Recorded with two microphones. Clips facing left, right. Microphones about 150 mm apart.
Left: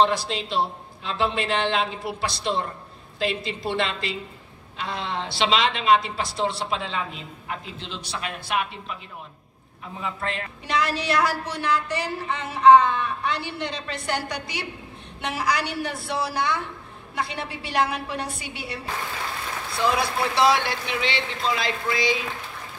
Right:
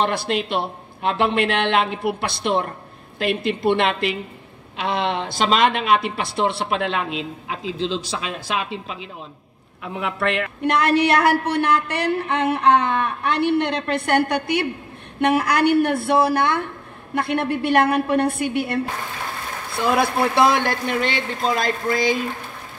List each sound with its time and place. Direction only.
0.0 s a woman's voice: 60° right (ahead or behind)
5.3 s speech: 45° right (ahead or behind); by 8.9 s 90° right
9.8 s a woman's voice: 75° right (ahead or behind); by 22.2 s 50° right (ahead or behind)